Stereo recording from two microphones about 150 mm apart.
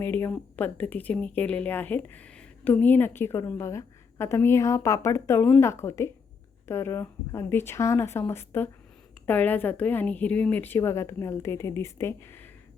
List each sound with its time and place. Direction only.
0.0 s speech: 15° left (ahead or behind)